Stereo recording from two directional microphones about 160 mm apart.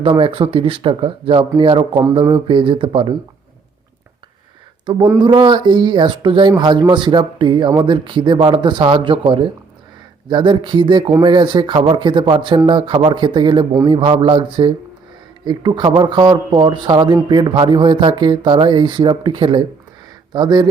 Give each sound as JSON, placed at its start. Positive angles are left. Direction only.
{"t": 0.0, "sound": "speech", "side_deg": -35}
{"t": 5.2, "sound": "speech", "side_deg": -30}